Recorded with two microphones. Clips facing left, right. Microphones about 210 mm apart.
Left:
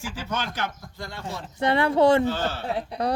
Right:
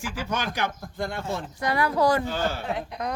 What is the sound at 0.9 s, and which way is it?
Speech, 55° right (ahead or behind).